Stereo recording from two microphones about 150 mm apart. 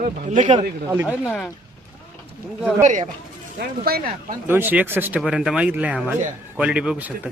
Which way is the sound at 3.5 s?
90° right.